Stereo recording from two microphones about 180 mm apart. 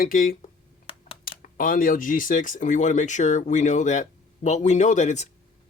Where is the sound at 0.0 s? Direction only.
50° left (ahead or behind).